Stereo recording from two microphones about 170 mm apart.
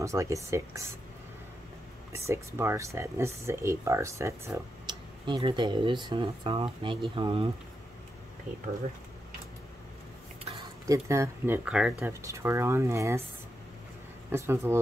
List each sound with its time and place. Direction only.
0.0 s speech: 15° right (ahead or behind)
2.1 s speech: 15° right (ahead or behind)
5.2 s speech: 30° right (ahead or behind)
10.9 s speech: 15° right (ahead or behind)
12.1 s speech: 15° right (ahead or behind)
14.3 s speech: 15° right (ahead or behind)